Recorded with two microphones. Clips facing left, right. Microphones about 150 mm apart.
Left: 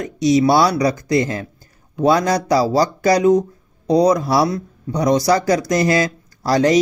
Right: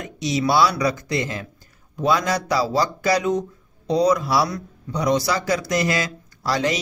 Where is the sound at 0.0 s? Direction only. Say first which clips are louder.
Left 8 dB; 40° left (ahead or behind).